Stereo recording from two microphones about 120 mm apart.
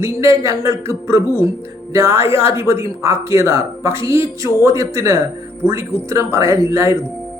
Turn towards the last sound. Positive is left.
turn(degrees=-25)  # may be behind; listen again after turning